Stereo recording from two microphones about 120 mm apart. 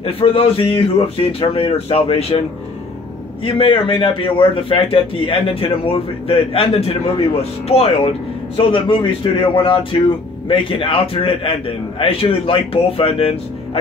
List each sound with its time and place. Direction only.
0.0 s a man's voice: 55° left (ahead or behind)
3.4 s a man's voice: 50° left (ahead or behind)
8.5 s a man's voice: 45° left (ahead or behind)